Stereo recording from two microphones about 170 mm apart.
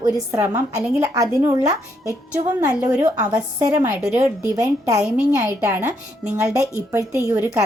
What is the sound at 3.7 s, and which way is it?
Speech, 10° right (ahead or behind).